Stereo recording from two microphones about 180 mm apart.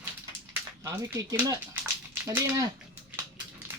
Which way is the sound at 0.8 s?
15° right (ahead or behind).